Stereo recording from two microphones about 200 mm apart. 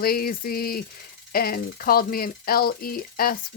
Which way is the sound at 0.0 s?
50° left (ahead or behind).